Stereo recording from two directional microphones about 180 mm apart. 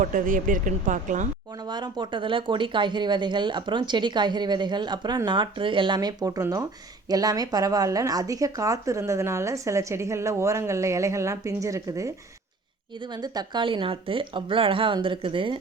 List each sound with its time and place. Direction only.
0.0 s speech: 50° right (ahead or behind)
1.6 s speech: 25° right (ahead or behind)
13.1 s speech: 20° right (ahead or behind)